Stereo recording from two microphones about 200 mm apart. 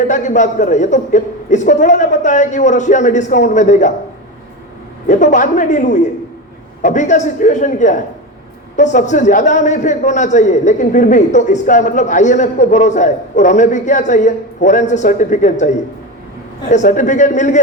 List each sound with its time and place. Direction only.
0.1 s a man's voice: 40° left (ahead or behind)
5.0 s a man's voice: 40° left (ahead or behind)